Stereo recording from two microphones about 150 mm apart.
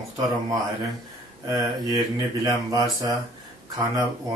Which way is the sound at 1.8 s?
25° right (ahead or behind).